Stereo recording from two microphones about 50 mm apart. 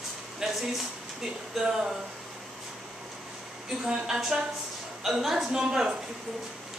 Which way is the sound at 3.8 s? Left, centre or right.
Centre.